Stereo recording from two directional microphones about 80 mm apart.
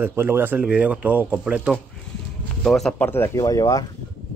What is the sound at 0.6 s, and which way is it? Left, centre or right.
Speech, centre.